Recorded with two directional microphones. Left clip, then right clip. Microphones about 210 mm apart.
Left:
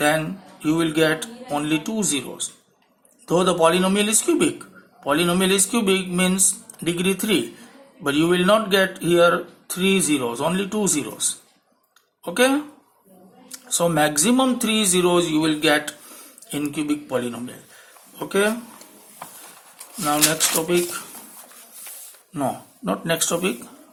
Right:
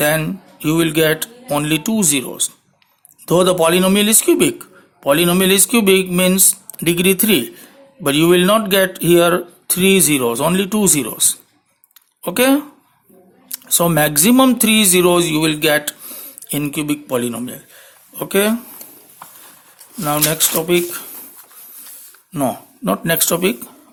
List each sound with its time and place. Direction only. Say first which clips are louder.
0.0 s speech: right 3 dB; 45° right (ahead or behind)
20.1 s speech: right 2 dB; 45° right (ahead or behind)
22.3 s speech: right 5 dB; 45° right (ahead or behind)